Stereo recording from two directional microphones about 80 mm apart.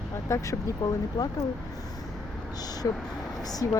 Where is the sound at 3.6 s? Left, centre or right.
Left.